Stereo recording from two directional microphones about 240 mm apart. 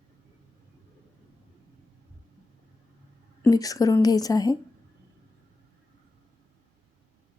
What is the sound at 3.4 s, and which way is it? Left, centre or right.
A woman's voice, centre.